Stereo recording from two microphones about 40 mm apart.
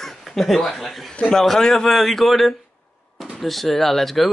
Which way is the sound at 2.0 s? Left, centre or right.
Centre.